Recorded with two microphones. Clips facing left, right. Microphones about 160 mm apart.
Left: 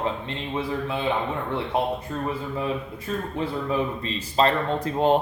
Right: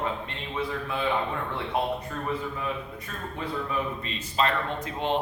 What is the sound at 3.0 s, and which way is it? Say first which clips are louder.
A man's voice: left 7 dB; 30° left (ahead or behind).